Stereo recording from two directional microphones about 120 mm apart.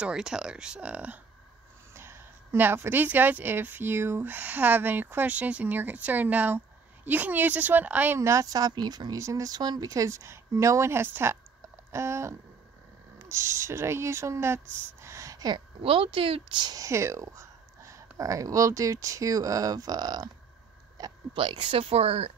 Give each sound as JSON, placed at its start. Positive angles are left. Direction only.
{"t": 0.0, "sound": "speech", "side_deg": -5}
{"t": 15.8, "sound": "speech", "side_deg": -50}